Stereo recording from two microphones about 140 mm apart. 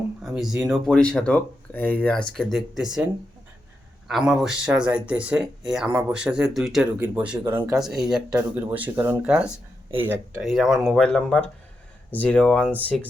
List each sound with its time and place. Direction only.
0.3 s speech: 5° right (ahead or behind)
4.1 s speech: centre (ahead or behind); by 7.7 s 20° right (ahead or behind)
7.7 s speech: 5° right (ahead or behind)
8.3 s speech: 15° right (ahead or behind)
10.4 s speech: centre (ahead or behind)